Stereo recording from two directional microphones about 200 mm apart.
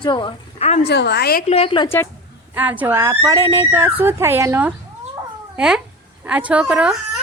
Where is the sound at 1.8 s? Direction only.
10° left (ahead or behind).